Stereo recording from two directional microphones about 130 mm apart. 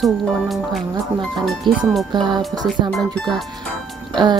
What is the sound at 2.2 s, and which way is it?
Speech, 35° right (ahead or behind).